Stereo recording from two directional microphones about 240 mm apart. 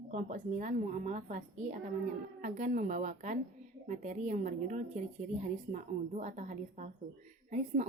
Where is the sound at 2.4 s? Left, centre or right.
Right.